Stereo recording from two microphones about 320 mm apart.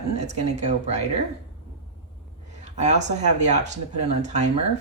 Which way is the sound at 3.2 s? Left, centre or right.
Right.